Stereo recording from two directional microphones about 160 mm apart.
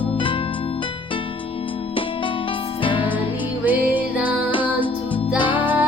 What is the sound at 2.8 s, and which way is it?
Music, 30° left (ahead or behind).